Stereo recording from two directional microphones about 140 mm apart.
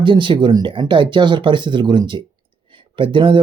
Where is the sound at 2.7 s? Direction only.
35° right (ahead or behind).